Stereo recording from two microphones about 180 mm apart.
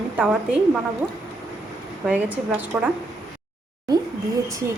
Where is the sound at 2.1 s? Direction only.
10° right (ahead or behind).